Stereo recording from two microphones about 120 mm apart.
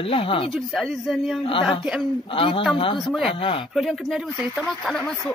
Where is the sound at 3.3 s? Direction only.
50° left (ahead or behind).